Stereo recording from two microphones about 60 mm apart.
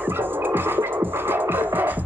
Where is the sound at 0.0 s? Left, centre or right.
Right.